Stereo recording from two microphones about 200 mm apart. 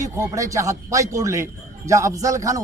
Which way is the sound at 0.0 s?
15° right (ahead or behind).